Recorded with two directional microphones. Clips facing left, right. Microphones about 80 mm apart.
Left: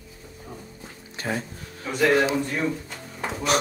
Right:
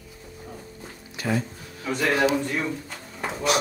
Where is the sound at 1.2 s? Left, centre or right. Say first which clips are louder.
Right 3 dB; left.